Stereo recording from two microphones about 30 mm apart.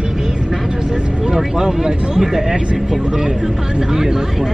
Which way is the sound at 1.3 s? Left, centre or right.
Centre.